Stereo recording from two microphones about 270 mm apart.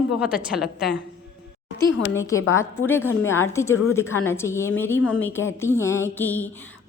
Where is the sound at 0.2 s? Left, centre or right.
Centre.